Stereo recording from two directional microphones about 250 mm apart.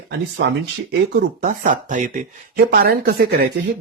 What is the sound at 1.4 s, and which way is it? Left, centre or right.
Speech, right.